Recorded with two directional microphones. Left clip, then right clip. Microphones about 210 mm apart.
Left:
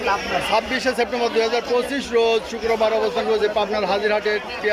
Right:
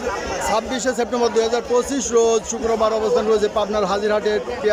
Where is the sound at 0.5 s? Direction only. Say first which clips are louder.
Left 1 dB; 10° right (ahead or behind).